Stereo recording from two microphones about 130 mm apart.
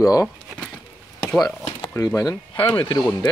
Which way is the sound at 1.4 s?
30° left (ahead or behind).